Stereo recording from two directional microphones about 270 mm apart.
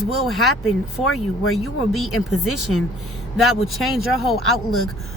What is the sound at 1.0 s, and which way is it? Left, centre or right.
Speech, left.